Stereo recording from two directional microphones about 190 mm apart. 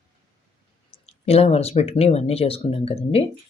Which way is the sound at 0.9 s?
30° left (ahead or behind).